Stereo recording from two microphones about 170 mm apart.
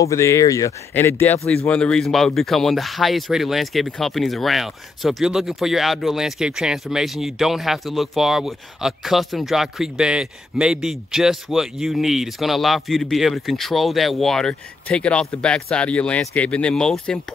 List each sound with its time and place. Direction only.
0.0 s speech: 15° left (ahead or behind)